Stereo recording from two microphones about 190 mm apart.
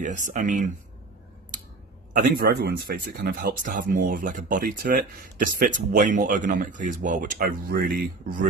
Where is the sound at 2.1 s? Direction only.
50° right (ahead or behind).